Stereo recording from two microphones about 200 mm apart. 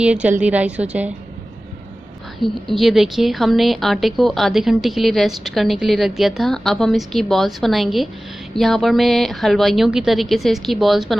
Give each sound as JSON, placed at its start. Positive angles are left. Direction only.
{"t": 0.0, "sound": "a woman's voice", "side_deg": -5}
{"t": 2.4, "sound": "a woman's voice", "side_deg": 0}